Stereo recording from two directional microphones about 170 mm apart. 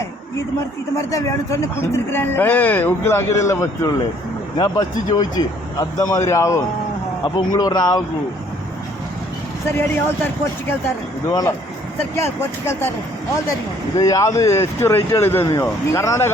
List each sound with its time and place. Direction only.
1.1 s speech: 20° left (ahead or behind)
9.6 s speech: 15° left (ahead or behind)
14.0 s speech: 20° left (ahead or behind)